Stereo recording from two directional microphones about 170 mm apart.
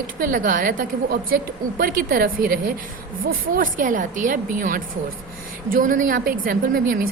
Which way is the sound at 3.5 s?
50° right (ahead or behind).